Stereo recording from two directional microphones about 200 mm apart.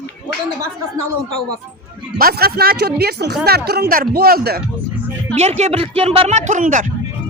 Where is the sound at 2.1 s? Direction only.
50° right (ahead or behind).